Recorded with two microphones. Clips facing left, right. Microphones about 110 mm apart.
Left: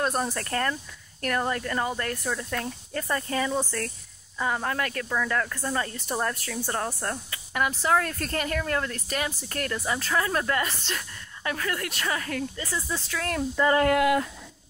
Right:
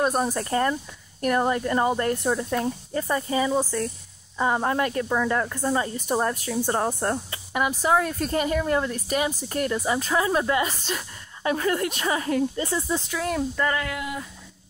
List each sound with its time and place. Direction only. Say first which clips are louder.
0.0 s speech: right 4 dB; 15° right (ahead or behind)
4.4 s speech: right 5 dB; 25° right (ahead or behind)
7.6 s speech: right 2 dB; 15° right (ahead or behind)
13.7 s a sound: left 8 dB; 50° left (ahead or behind)